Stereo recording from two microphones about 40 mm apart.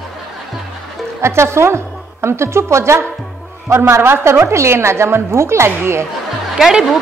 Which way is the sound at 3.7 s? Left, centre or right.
Right.